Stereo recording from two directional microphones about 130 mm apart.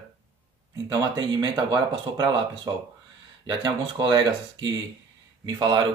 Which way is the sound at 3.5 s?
30° right (ahead or behind).